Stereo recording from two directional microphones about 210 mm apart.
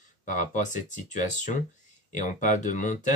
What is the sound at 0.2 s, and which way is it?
Speech, 35° left (ahead or behind).